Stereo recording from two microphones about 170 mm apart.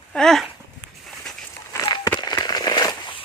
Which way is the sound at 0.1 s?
5° left (ahead or behind).